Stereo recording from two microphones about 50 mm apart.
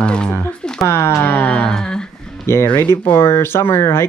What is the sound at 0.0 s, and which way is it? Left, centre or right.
Speech, centre.